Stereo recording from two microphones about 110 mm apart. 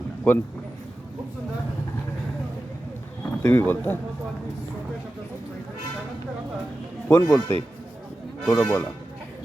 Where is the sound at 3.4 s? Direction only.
20° left (ahead or behind).